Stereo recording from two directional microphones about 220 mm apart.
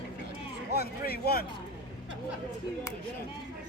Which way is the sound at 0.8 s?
45° left (ahead or behind).